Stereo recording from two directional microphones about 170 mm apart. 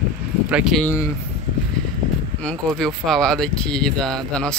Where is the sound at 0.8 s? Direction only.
15° left (ahead or behind).